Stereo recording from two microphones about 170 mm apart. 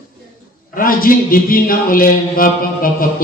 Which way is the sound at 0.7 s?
55° left (ahead or behind).